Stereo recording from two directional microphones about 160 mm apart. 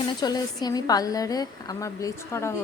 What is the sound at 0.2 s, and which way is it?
A woman's voice, 25° left (ahead or behind).